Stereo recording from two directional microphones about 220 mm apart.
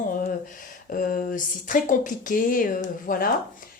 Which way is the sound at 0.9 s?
40° left (ahead or behind).